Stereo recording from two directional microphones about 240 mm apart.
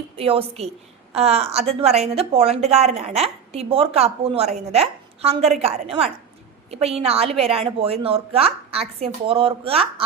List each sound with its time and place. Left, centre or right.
0.2 s a woman's voice: right